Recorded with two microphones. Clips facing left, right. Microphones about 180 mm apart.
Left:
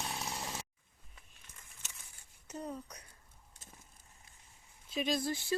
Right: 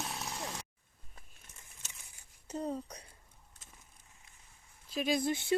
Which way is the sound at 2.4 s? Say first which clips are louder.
Right 5 dB; 30° right (ahead or behind).